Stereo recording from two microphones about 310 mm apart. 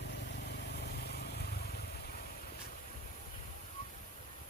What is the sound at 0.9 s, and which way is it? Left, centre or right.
Vehicle, left.